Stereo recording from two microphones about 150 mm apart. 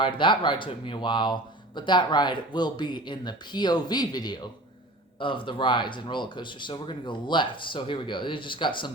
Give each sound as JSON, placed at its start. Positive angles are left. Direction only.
{"t": 0.0, "sound": "speech", "side_deg": 35}